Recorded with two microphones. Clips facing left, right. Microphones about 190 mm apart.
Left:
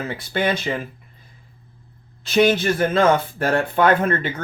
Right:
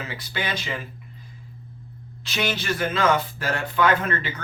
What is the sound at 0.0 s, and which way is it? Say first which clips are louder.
Speech: left 8 dB; 55° left (ahead or behind).